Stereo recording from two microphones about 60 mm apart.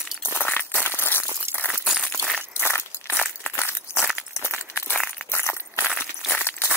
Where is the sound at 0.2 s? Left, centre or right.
Left.